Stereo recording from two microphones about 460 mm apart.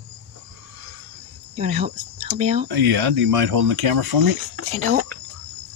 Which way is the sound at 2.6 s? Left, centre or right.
Right.